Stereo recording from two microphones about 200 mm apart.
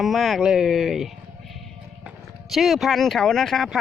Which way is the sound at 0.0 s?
Centre (ahead or behind).